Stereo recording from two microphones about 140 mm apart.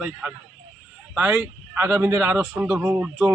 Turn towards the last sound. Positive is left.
turn(degrees=-10)  # may be behind; listen again after turning